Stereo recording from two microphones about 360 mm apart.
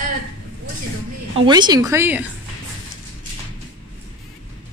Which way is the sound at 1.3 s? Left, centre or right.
Centre.